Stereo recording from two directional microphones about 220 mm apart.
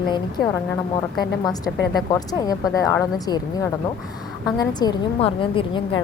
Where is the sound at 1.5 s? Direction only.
15° left (ahead or behind).